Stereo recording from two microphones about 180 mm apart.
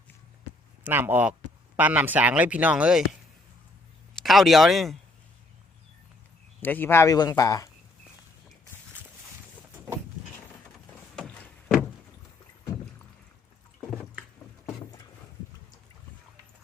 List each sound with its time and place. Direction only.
0.9 s speech: 10° right (ahead or behind)
6.6 s speech: 10° left (ahead or behind)
11.1 s a sound: 5° left (ahead or behind)